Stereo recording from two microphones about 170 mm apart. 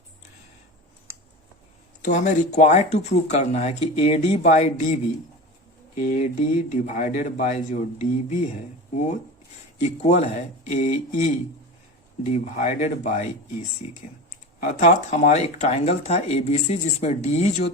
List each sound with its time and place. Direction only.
2.0 s speech: 45° left (ahead or behind)
6.0 s speech: 50° left (ahead or behind)
9.8 s speech: 40° left (ahead or behind)
14.6 s speech: 45° left (ahead or behind)